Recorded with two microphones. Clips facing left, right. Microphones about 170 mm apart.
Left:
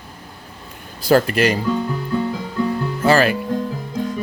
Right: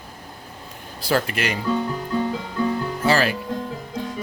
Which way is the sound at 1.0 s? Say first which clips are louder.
Left 8 dB; 40° left (ahead or behind).